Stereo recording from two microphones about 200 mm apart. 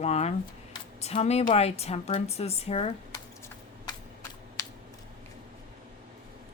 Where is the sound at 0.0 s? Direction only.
35° left (ahead or behind).